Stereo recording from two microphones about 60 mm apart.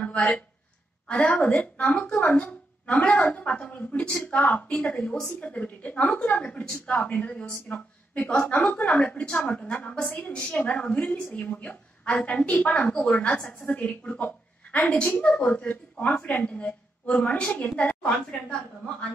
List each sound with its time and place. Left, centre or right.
0.0 s a sound: left
1.3 s a woman's voice: left
2.9 s a woman's voice: left; by 5.3 s centre
5.4 s a woman's voice: left